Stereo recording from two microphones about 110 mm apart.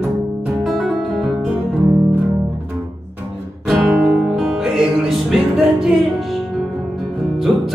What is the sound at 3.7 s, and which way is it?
Music, 5° right (ahead or behind).